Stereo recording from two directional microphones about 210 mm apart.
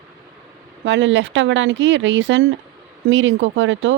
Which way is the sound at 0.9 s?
60° right (ahead or behind).